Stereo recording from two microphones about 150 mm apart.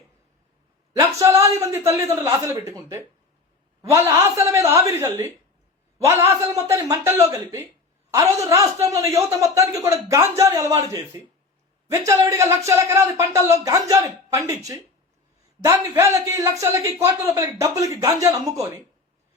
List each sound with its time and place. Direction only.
0.9 s speech: 20° right (ahead or behind)